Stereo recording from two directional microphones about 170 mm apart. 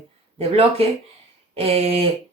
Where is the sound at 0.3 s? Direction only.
35° right (ahead or behind).